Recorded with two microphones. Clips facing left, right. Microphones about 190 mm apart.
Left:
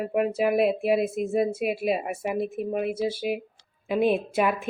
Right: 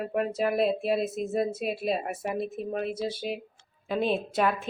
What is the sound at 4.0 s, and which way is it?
Speech, 55° left (ahead or behind).